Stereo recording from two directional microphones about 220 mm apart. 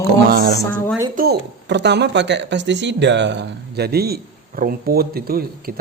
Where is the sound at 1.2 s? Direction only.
50° right (ahead or behind).